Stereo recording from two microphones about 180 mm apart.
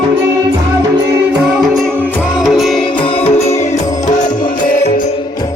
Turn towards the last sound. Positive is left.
turn(degrees=40)  # may be behind; listen again after turning